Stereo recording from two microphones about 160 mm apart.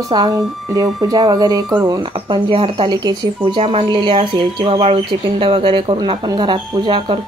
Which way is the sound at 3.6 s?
40° right (ahead or behind).